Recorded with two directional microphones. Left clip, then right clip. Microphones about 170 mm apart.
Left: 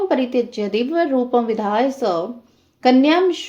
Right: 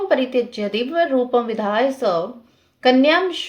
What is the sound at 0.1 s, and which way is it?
Speech, 40° left (ahead or behind).